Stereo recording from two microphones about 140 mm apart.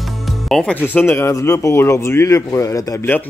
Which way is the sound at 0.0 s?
Centre (ahead or behind).